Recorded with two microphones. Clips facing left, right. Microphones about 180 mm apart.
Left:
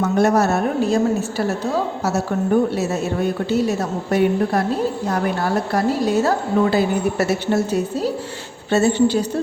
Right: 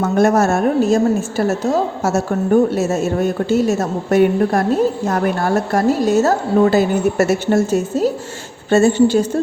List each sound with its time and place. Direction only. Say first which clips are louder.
0.0 s a woman's voice: right 2 dB; 50° right (ahead or behind)